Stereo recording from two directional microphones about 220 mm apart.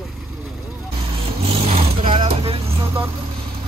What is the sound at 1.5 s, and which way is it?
Vehicle, 25° right (ahead or behind).